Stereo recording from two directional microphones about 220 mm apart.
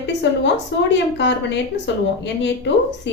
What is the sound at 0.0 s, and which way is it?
Speech, 50° left (ahead or behind).